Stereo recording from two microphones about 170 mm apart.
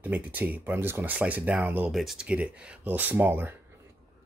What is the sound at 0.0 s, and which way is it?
Speech, 10° right (ahead or behind).